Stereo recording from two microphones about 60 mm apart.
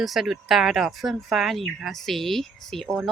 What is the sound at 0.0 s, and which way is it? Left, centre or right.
Speech, centre.